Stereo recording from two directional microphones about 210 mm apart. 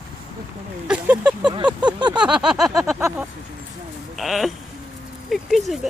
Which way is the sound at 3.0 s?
10° right (ahead or behind).